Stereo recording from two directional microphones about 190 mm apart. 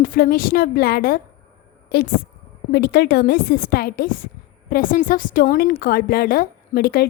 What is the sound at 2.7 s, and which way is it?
A woman's voice, 60° left (ahead or behind).